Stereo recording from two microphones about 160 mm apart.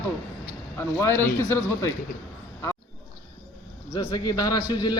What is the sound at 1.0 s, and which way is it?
Speech, 20° left (ahead or behind).